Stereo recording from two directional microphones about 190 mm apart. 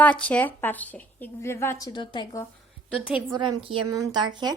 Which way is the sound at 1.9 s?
25° left (ahead or behind).